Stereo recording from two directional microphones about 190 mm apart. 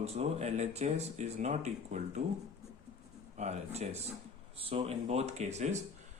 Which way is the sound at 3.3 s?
35° right (ahead or behind).